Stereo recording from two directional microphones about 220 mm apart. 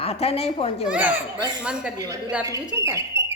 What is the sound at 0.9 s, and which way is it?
Speech, 5° right (ahead or behind).